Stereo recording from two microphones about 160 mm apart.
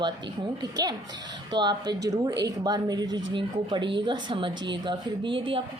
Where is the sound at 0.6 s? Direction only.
25° right (ahead or behind).